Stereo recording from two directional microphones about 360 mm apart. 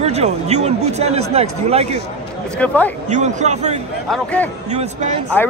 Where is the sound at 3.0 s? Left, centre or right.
Centre.